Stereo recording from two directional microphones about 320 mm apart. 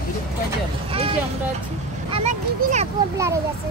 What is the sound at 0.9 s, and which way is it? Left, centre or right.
A child's voice, centre.